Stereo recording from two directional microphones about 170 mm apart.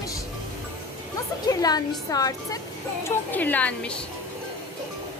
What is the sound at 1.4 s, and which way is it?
A woman's voice, 20° left (ahead or behind).